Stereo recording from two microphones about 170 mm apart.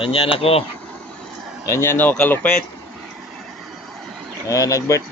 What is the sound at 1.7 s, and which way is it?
Speech, 15° left (ahead or behind).